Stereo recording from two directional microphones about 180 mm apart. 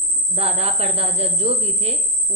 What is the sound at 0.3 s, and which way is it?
A woman's voice, 35° right (ahead or behind).